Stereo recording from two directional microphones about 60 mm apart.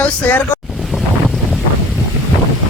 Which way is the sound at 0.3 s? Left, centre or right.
Left.